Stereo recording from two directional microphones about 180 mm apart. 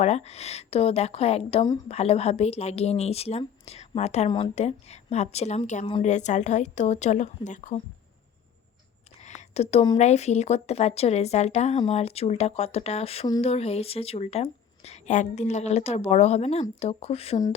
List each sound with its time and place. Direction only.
0.0 s speech: 35° left (ahead or behind)
9.2 s a sound: 40° left (ahead or behind)
10.0 s speech: 40° left (ahead or behind)